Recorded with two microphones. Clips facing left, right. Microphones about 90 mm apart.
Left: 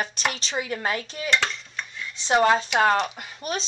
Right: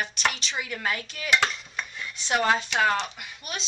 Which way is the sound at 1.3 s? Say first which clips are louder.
Right 1 dB; 5° right (ahead or behind).